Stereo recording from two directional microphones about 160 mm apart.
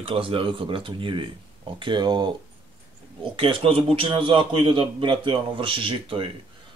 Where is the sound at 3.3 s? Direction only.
35° right (ahead or behind).